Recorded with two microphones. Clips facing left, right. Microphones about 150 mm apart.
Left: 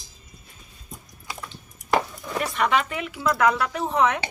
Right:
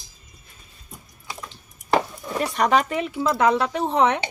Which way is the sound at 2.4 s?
40° right (ahead or behind).